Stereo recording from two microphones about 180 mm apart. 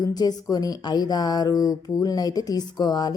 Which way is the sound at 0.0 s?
20° left (ahead or behind).